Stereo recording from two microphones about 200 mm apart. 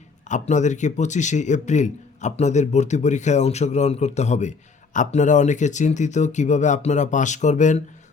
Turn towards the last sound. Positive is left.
turn(degrees=35)  # may be behind; listen again after turning